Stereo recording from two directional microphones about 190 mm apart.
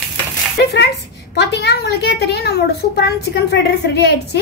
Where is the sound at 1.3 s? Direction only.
60° left (ahead or behind).